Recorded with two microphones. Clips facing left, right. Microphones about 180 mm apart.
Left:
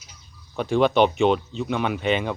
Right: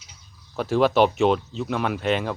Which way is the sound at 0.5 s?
Centre (ahead or behind).